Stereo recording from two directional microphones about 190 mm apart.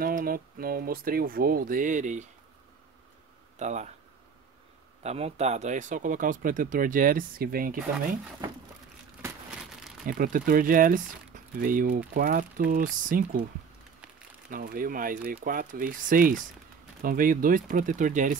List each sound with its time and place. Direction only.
0.0 s speech: 50° right (ahead or behind)
3.5 s speech: 40° right (ahead or behind)
5.0 s speech: 35° right (ahead or behind)
10.0 s speech: 45° right (ahead or behind)
14.5 s speech: 45° right (ahead or behind)